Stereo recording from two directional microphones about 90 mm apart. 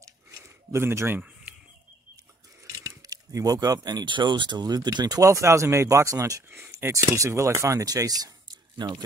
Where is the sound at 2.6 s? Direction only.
35° right (ahead or behind).